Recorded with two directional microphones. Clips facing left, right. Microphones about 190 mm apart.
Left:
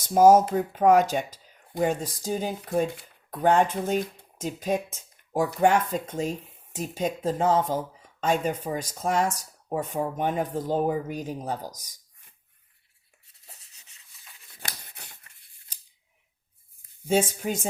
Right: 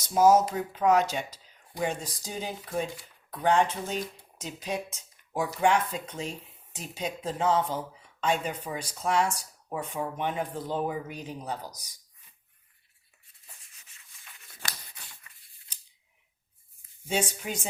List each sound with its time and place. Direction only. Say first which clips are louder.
0.1 s speech: left 4 dB; 50° left (ahead or behind)
11.8 s a sound: even; 45° left (ahead or behind)
14.6 s scissors: left 1 dB; 55° left (ahead or behind)
17.1 s speech: left 6 dB; 45° left (ahead or behind)